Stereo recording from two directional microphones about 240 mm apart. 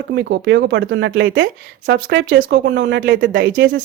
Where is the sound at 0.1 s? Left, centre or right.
Right.